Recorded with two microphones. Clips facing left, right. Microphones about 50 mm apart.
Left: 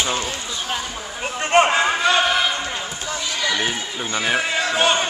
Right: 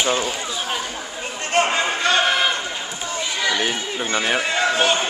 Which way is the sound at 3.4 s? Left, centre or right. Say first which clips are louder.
Right 1 dB; centre.